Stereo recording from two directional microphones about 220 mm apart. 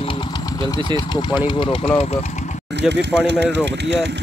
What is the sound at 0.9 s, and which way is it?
Speech, 20° left (ahead or behind).